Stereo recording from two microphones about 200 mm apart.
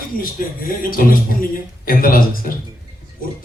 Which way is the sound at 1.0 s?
45° left (ahead or behind).